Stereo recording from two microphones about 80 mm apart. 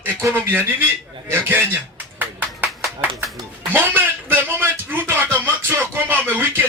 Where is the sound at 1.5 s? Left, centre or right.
Right.